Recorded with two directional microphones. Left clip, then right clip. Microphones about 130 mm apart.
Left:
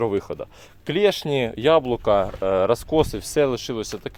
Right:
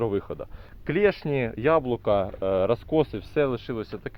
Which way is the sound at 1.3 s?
45° left (ahead or behind).